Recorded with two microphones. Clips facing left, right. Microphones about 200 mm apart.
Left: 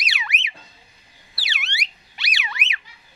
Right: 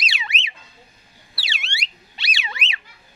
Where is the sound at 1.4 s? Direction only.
25° right (ahead or behind).